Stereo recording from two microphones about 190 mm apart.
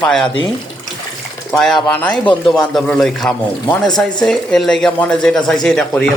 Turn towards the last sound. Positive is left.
turn(degrees=5)  # may be behind; listen again after turning